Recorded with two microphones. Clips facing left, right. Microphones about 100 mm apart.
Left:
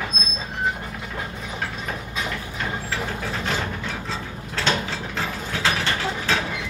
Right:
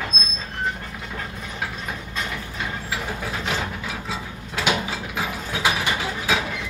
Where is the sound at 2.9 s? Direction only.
5° right (ahead or behind).